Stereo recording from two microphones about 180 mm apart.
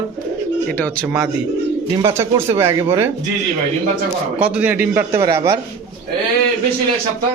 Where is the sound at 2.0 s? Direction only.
20° right (ahead or behind).